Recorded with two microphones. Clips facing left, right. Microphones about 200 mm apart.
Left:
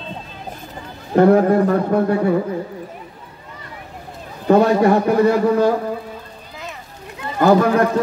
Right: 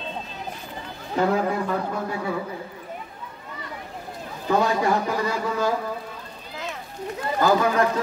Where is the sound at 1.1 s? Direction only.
55° left (ahead or behind).